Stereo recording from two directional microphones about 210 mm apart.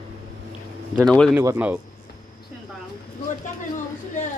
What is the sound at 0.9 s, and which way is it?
Speech, 5° left (ahead or behind).